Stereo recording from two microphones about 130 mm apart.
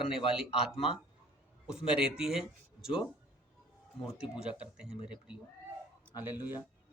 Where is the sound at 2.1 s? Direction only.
5° right (ahead or behind).